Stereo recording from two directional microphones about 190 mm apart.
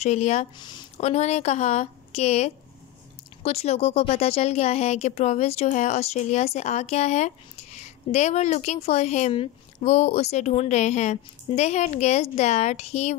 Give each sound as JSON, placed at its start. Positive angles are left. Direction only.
{"t": 0.0, "sound": "speech", "side_deg": 35}
{"t": 0.6, "sound": "speech", "side_deg": 25}